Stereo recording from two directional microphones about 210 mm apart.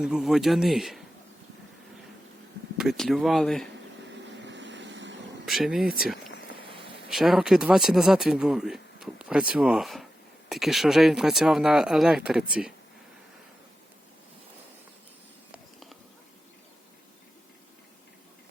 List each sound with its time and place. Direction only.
0.0 s speech: 5° right (ahead or behind)
2.7 s speech: centre (ahead or behind)
4.1 s vehicle: 60° right (ahead or behind)
5.5 s speech: centre (ahead or behind)
6.7 s a sound: 25° right (ahead or behind)
7.1 s speech: centre (ahead or behind)
15.5 s a sound: centre (ahead or behind)